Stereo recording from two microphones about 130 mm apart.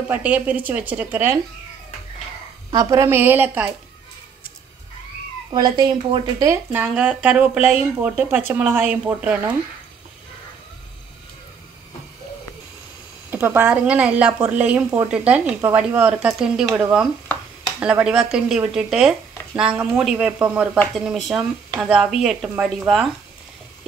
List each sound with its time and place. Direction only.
0.1 s a woman's voice: 10° right (ahead or behind)
2.7 s a woman's voice: 25° right (ahead or behind)
5.5 s speech: 35° right (ahead or behind)
6.5 s a woman's voice: 20° right (ahead or behind)
13.3 s a woman's voice: 15° right (ahead or behind)